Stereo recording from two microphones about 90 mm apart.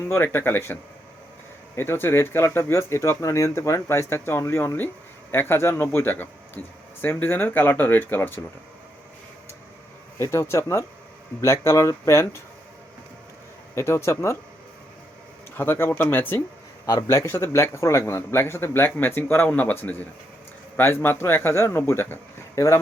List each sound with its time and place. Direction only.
0.0 s a man's voice: 25° left (ahead or behind)
10.2 s speech: 30° left (ahead or behind)
13.7 s speech: 30° left (ahead or behind)
15.5 s a man's voice: 25° left (ahead or behind)
16.8 s a man's voice: 35° left (ahead or behind)